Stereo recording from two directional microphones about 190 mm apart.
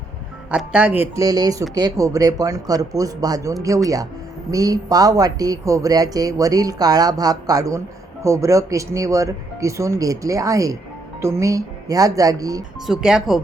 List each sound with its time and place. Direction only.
0.5 s speech: 5° right (ahead or behind)
4.5 s speech: 20° right (ahead or behind)
12.8 s speech: 5° right (ahead or behind)